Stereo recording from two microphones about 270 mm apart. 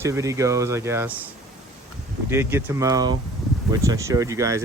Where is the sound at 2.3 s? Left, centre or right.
Centre.